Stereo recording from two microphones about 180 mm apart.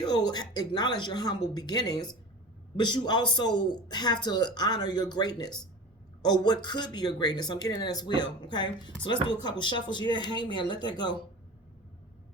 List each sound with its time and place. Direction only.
0.0 s speech: 25° left (ahead or behind)